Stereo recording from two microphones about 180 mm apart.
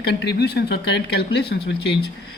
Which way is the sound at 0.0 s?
65° left (ahead or behind).